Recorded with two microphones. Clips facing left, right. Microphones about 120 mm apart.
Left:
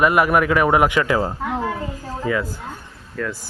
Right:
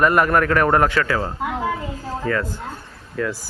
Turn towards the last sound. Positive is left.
turn(degrees=0)  # may be behind; listen again after turning